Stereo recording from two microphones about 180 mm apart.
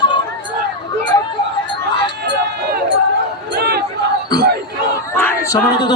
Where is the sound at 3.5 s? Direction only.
60° right (ahead or behind).